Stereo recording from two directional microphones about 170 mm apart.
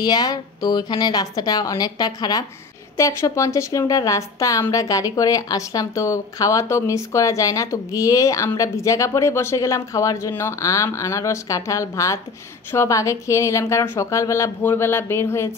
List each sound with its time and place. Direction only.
0.0 s a woman's voice: 25° left (ahead or behind)